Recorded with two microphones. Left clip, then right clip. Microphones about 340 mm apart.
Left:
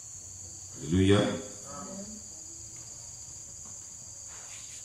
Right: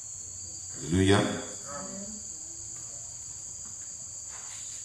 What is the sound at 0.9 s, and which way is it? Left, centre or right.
Speech, centre.